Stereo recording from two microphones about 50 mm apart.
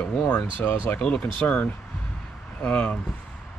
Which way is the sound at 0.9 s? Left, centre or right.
Centre.